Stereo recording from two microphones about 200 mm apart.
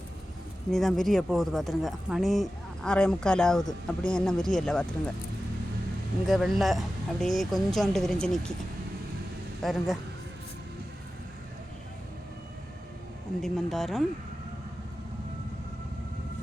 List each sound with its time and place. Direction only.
0.7 s speech: centre (ahead or behind)
6.2 s speech: centre (ahead or behind)
9.6 s speech: centre (ahead or behind)
13.4 s speech: centre (ahead or behind)